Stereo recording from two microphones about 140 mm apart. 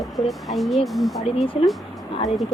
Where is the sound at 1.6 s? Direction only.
45° left (ahead or behind).